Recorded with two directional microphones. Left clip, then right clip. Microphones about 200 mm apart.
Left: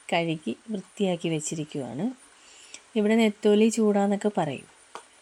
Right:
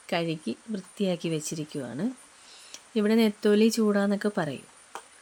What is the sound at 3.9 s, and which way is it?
Speech, centre (ahead or behind).